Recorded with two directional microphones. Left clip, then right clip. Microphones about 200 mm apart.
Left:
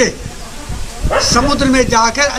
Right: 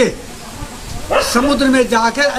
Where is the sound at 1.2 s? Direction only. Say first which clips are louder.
Left 2 dB; 25° right (ahead or behind).